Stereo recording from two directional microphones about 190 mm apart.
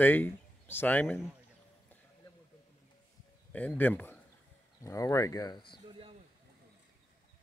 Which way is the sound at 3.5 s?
10° left (ahead or behind).